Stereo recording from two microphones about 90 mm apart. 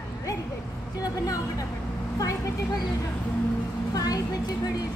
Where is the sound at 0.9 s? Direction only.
45° left (ahead or behind).